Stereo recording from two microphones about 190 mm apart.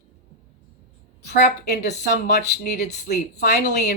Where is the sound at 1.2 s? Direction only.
60° left (ahead or behind).